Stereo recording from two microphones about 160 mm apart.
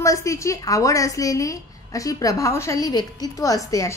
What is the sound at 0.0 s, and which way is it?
A woman's voice, 20° left (ahead or behind).